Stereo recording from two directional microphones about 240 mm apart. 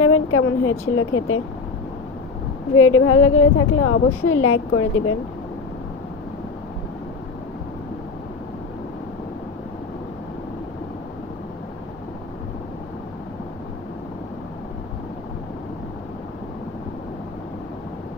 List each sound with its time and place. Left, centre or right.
0.0 s speech: left
2.7 s a woman's voice: left